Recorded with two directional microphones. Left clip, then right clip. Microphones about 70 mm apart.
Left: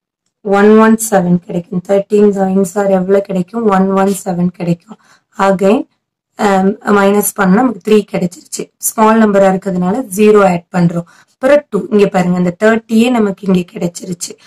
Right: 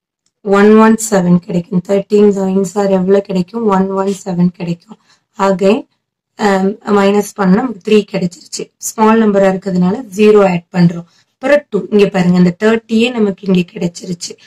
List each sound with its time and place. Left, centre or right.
0.6 s a woman's voice: centre
2.2 s a woman's voice: centre; by 14.4 s left